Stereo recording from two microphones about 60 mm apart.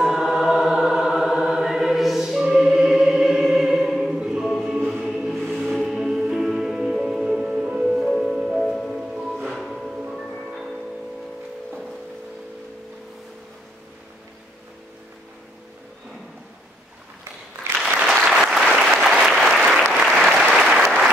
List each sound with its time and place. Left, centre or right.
0.0 s music: centre
8.1 s music: centre
18.1 s applause: centre